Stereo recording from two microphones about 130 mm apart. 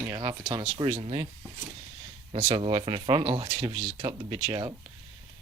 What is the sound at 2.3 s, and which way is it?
Speech, 45° right (ahead or behind).